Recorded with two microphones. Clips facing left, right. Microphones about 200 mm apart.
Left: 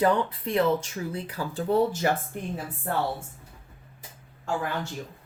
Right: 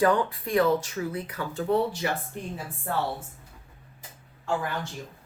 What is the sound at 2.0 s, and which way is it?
Speech, 45° left (ahead or behind).